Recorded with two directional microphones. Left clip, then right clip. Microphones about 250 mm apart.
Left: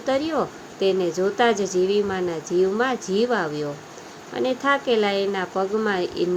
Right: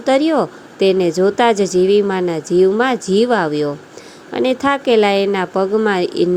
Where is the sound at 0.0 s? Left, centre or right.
Right.